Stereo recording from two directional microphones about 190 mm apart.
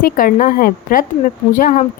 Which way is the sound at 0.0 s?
45° left (ahead or behind).